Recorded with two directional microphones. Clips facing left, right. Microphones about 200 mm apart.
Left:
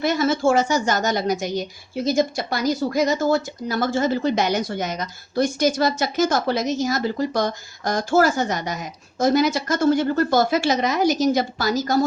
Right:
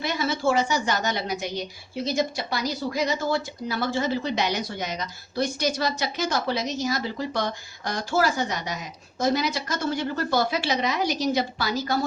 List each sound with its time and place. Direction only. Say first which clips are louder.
0.0 s speech: left 6 dB; 45° left (ahead or behind)